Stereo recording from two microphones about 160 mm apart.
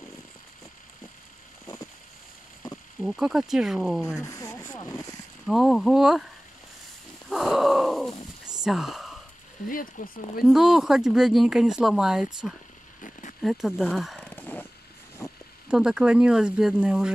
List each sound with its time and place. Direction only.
3.0 s speech: 5° right (ahead or behind)
4.3 s a sound: 20° left (ahead or behind)
5.5 s speech: centre (ahead or behind)
7.2 s a sound: centre (ahead or behind)
9.7 s speech: 60° left (ahead or behind)
10.4 s speech: 5° right (ahead or behind)
13.4 s speech: centre (ahead or behind)
14.2 s vehicle: 10° left (ahead or behind)
15.2 s zipper: 20° left (ahead or behind)
15.7 s speech: 5° right (ahead or behind)